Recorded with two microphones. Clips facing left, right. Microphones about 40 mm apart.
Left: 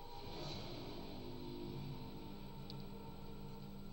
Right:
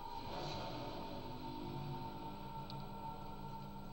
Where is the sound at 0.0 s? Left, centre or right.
Right.